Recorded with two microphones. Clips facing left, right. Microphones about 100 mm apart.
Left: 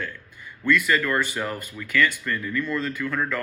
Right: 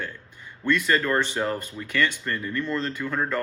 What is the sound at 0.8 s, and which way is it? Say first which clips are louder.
Speech: even; 30° right (ahead or behind).